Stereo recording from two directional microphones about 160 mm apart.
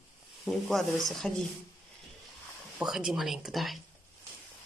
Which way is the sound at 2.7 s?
5° right (ahead or behind).